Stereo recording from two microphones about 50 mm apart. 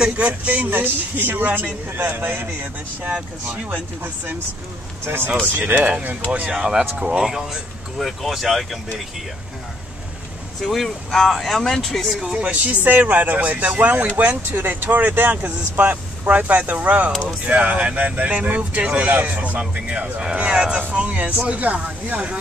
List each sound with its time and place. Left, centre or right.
0.0 s a man's voice: right
3.6 s speech: right
5.0 s a man's voice: right
5.6 s speech: right
6.5 s speech: centre
8.0 s speech: centre
10.6 s speech: centre
12.2 s speech: centre
12.4 s speech: right